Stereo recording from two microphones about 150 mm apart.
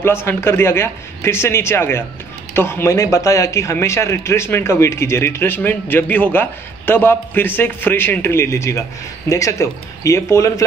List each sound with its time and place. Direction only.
0.0 s speech: 15° left (ahead or behind)